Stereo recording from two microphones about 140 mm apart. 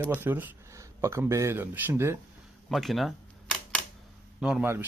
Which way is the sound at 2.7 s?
Centre (ahead or behind).